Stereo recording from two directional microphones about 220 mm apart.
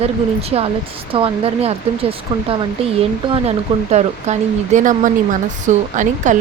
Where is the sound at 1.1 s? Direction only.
25° right (ahead or behind).